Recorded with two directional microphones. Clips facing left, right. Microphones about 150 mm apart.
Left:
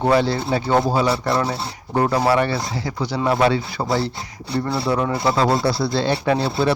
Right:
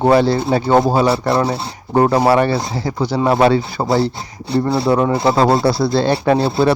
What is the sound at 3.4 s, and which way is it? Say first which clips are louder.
Speech: right 5 dB; 40° right (ahead or behind).